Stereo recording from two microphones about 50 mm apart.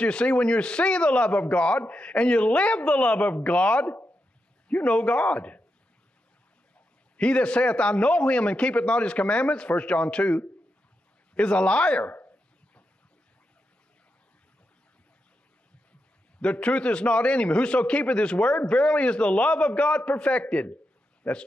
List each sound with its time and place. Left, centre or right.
0.0 s a man's voice: left
7.2 s a man's voice: left
16.3 s a man's voice: left